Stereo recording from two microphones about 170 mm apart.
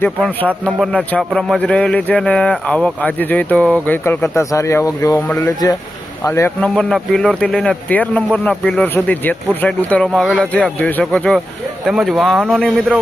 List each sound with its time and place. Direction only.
0.0 s speech: 10° left (ahead or behind)
6.6 s speech: 5° left (ahead or behind)